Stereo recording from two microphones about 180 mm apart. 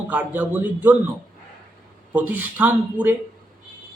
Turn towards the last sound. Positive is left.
turn(degrees=-10)  # may be behind; listen again after turning